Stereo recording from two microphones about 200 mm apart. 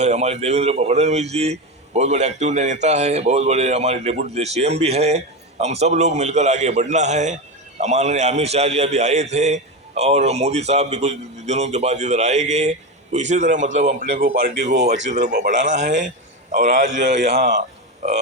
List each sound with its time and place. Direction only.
0.0 s a man's voice: 35° right (ahead or behind)